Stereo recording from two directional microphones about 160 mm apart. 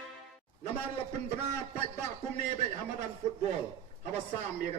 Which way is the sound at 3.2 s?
40° right (ahead or behind).